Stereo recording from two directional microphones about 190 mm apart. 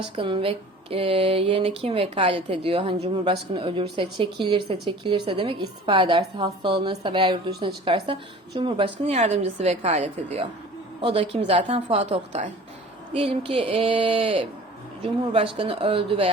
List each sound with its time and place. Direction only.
0.0 s a woman's voice: 25° right (ahead or behind)